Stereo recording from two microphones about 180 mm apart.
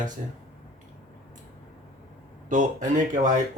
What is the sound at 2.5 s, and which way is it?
Speech, 45° right (ahead or behind).